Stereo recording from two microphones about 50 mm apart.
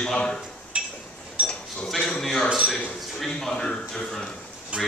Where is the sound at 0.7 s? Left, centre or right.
Right.